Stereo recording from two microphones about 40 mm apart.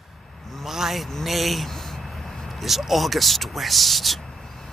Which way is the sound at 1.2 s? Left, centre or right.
Centre.